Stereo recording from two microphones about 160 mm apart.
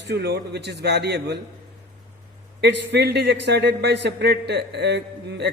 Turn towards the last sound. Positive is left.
turn(degrees=-90)